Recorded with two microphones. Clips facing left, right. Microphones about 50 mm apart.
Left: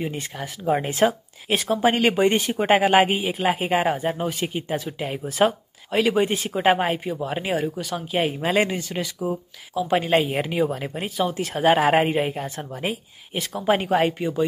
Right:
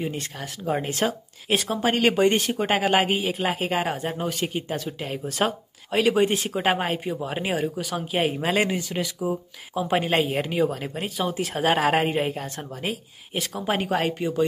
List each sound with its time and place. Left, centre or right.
0.0 s speech: centre
1.5 s speech: centre
5.9 s speech: centre